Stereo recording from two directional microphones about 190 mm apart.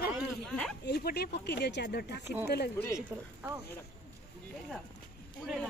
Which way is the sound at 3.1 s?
10° right (ahead or behind).